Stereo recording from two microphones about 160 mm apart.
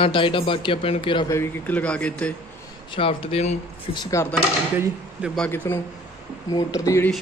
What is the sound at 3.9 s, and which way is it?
Speech, 20° left (ahead or behind).